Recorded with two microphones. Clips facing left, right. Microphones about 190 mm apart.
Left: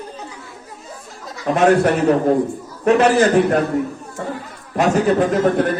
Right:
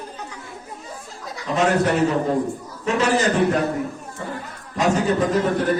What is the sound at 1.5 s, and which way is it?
Speech, 55° left (ahead or behind).